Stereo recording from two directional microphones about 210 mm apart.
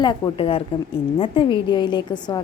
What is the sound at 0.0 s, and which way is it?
A woman's voice, 25° left (ahead or behind).